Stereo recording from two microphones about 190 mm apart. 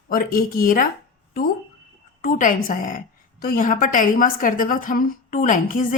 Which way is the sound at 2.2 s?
45° left (ahead or behind).